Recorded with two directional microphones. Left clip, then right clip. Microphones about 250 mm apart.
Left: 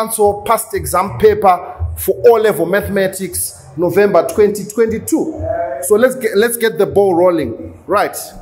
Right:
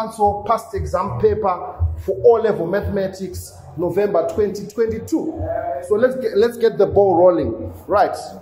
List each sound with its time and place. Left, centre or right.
0.0 s speech: left